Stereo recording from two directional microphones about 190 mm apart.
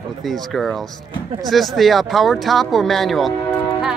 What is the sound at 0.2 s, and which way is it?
Speech, centre (ahead or behind).